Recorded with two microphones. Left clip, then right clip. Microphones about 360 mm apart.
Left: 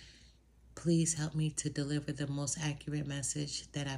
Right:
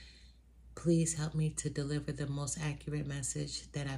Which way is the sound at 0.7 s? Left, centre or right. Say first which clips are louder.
Even; centre.